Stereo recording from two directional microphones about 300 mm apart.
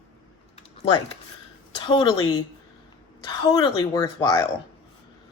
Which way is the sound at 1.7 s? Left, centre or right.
Centre.